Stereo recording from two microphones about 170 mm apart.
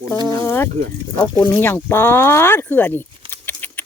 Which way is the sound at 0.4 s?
15° left (ahead or behind).